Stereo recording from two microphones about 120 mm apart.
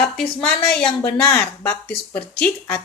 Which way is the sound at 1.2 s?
20° left (ahead or behind).